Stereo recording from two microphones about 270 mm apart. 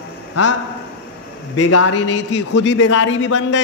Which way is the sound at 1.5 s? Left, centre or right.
Left.